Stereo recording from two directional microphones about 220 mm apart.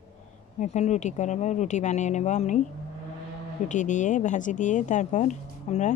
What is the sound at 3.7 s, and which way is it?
Speech, 35° left (ahead or behind).